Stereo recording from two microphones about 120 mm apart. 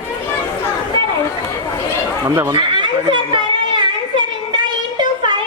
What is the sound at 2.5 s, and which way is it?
Chatter, 45° right (ahead or behind).